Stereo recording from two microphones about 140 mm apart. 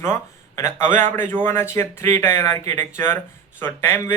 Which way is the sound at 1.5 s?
20° left (ahead or behind).